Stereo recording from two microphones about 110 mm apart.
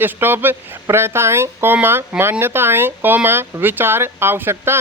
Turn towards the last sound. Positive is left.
turn(degrees=-20)  # may be behind; listen again after turning